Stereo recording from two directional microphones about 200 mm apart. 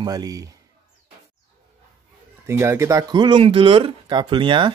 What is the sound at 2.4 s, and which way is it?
Speech, 15° right (ahead or behind).